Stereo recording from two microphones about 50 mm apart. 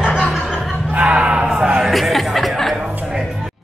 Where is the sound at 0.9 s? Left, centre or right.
Right.